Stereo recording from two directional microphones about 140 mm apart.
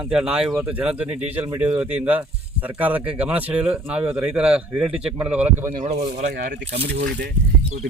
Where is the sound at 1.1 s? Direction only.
50° right (ahead or behind).